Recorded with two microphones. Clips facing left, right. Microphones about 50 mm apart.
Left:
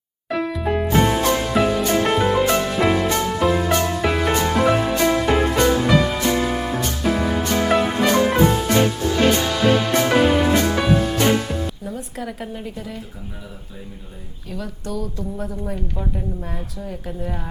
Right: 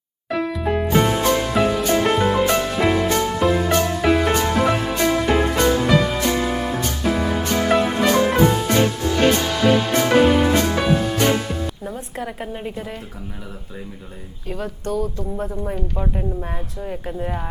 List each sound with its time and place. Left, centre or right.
0.3 s music: centre
11.8 s music: right
12.2 s a woman's voice: right
12.7 s a woman's voice: right
14.5 s speech: right
15.4 s a woman's voice: centre